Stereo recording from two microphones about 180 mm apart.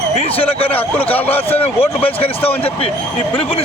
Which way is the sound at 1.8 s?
30° left (ahead or behind).